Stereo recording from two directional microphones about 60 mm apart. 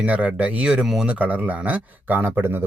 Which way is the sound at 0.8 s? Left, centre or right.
Centre.